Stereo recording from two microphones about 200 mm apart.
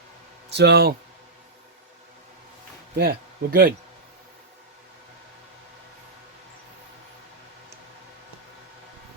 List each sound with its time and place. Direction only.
0.5 s speech: 55° right (ahead or behind)
3.0 s speech: 50° right (ahead or behind)